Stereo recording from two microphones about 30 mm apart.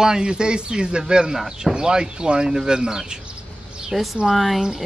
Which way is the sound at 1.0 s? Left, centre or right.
Centre.